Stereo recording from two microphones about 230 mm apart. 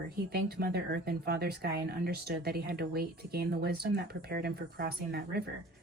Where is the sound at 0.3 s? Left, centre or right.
Right.